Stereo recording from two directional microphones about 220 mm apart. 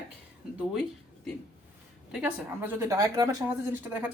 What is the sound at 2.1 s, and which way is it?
Speech, 5° right (ahead or behind).